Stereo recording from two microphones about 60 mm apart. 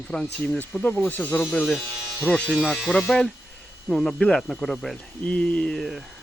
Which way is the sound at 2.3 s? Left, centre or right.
Centre.